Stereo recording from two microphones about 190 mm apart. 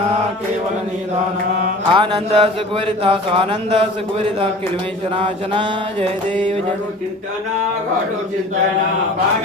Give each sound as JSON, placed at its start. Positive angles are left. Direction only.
{"t": 1.9, "sound": "speech", "side_deg": -25}
{"t": 5.1, "sound": "speech", "side_deg": -25}